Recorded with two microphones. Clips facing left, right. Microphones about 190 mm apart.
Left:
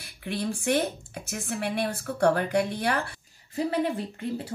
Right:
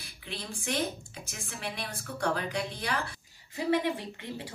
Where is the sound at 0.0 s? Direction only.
60° left (ahead or behind).